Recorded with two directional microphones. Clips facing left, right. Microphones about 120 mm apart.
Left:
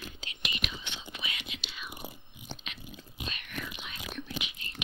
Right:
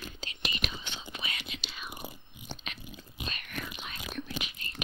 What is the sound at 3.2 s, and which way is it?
Whispering, 45° right (ahead or behind).